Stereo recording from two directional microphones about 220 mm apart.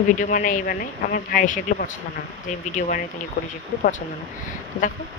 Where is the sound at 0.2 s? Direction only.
40° left (ahead or behind).